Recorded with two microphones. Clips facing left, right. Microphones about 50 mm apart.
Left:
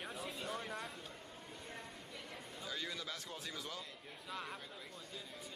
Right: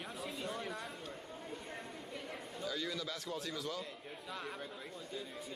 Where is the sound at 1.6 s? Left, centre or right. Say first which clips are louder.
Right 4 dB; centre.